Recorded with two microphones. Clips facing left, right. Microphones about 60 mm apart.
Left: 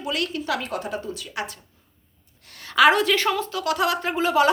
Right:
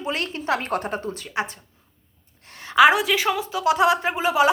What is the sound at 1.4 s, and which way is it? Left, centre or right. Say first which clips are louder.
Speech: right 5 dB; right.